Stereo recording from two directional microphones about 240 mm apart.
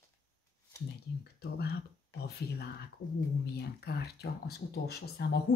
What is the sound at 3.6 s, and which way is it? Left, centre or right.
A woman's voice, left.